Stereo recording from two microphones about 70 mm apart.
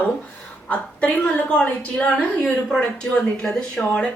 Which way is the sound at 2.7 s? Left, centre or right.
Centre.